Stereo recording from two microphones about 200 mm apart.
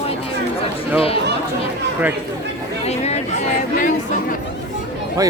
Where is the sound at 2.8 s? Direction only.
35° left (ahead or behind).